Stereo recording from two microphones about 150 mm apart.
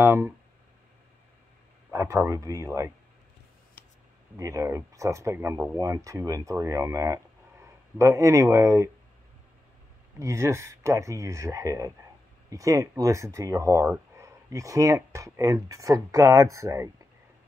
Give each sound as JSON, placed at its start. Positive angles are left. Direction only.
{"t": 0.0, "sound": "speech", "side_deg": -15}
{"t": 1.9, "sound": "speech", "side_deg": -20}
{"t": 4.4, "sound": "speech", "side_deg": -25}
{"t": 10.1, "sound": "speech", "side_deg": -20}